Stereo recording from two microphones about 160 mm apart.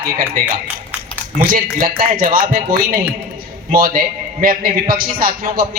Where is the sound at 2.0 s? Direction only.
65° right (ahead or behind).